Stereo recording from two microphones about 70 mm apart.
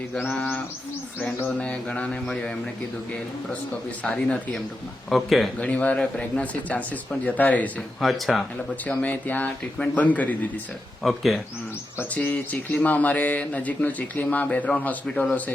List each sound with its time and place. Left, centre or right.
0.1 s mantra: centre
1.5 s mantra: centre
5.0 s speech: centre
5.5 s speech: centre
8.0 s speech: centre
8.9 s speech: left
11.0 s speech: centre
12.1 s speech: left
15.0 s mantra: centre